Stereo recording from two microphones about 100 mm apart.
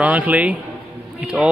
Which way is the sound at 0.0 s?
15° right (ahead or behind).